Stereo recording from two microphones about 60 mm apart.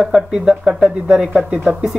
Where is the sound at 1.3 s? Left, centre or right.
Centre.